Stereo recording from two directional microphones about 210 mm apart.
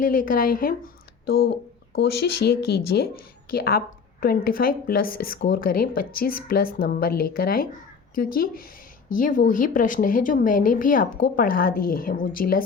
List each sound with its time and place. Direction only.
0.0 s a woman's voice: 40° left (ahead or behind)